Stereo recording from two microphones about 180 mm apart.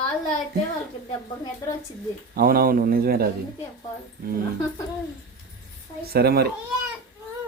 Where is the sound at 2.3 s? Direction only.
55° right (ahead or behind).